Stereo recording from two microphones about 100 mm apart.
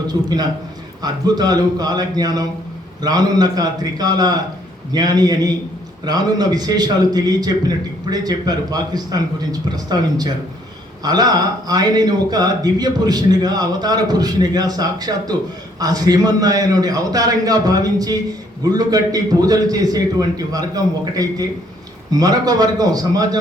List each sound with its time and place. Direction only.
0.1 s speech: 40° right (ahead or behind)